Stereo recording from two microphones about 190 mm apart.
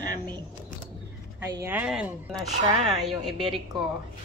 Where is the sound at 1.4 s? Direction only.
15° right (ahead or behind).